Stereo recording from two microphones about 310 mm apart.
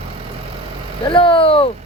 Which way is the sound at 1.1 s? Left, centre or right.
Centre.